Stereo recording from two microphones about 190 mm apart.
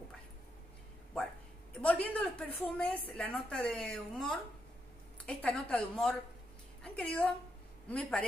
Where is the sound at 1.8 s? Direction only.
5° left (ahead or behind).